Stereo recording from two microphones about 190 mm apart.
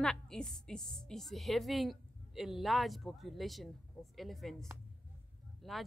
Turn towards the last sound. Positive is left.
turn(degrees=0)  # may be behind; listen again after turning